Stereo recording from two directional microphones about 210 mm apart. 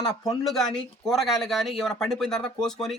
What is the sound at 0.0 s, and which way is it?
Speech, 20° left (ahead or behind).